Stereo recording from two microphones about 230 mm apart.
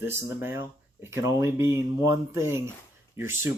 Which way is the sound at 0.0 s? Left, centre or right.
Centre.